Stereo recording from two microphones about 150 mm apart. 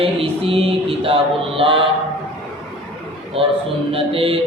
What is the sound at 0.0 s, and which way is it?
Music, 40° right (ahead or behind).